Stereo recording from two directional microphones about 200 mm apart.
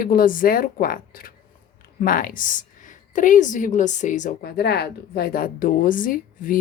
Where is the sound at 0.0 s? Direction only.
45° left (ahead or behind).